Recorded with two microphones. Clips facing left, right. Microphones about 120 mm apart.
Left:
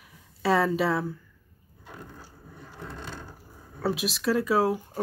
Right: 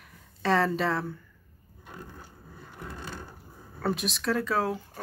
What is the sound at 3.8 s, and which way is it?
Speech, 5° left (ahead or behind).